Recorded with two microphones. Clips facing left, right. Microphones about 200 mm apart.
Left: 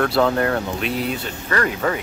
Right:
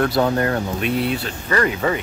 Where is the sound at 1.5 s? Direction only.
5° right (ahead or behind).